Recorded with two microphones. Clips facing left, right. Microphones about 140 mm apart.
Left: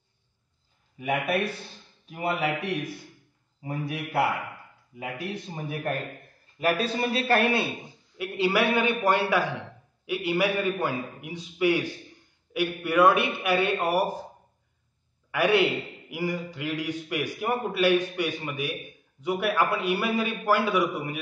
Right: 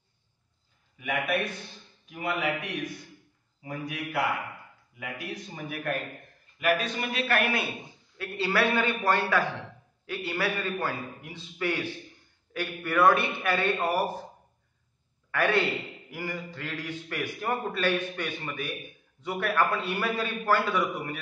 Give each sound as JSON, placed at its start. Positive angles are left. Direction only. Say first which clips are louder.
{"t": 0.9, "sound": "a man's voice", "louder": "left 3 dB", "side_deg": 35}
{"t": 3.6, "sound": "a man's voice", "louder": "left 3 dB", "side_deg": 30}
{"t": 8.2, "sound": "a man's voice", "louder": "left 3 dB", "side_deg": 15}
{"t": 15.3, "sound": "a man's voice", "louder": "left 4 dB", "side_deg": 10}